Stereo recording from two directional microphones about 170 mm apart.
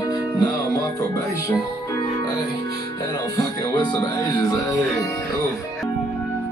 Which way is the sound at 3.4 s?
25° left (ahead or behind).